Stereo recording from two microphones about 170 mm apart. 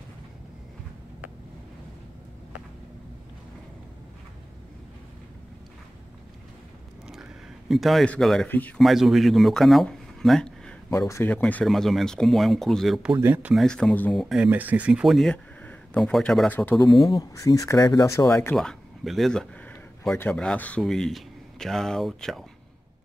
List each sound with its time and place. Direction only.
7.1 s speech: centre (ahead or behind)
10.9 s speech: 15° left (ahead or behind); by 13.1 s centre (ahead or behind)
13.1 s speech: 15° right (ahead or behind)
13.7 s speech: 5° left (ahead or behind)
14.3 s speech: 10° right (ahead or behind); by 18.3 s 20° left (ahead or behind)
18.3 s speech: 5° left (ahead or behind)